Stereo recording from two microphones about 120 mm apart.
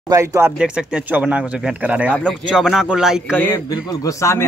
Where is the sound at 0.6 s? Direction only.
10° right (ahead or behind).